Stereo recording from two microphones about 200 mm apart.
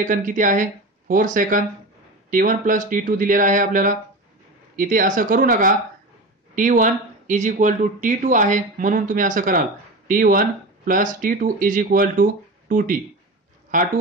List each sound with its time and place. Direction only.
0.0 s speech: 40° right (ahead or behind)